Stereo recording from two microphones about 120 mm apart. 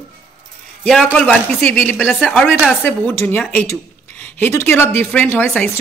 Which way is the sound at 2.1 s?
Centre (ahead or behind).